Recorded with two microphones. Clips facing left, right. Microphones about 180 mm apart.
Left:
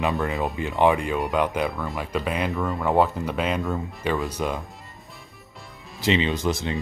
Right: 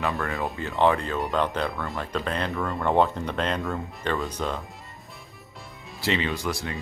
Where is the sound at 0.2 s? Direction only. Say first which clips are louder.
Left 3 dB; 20° left (ahead or behind).